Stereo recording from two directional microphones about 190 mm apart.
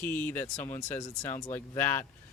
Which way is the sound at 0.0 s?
10° left (ahead or behind).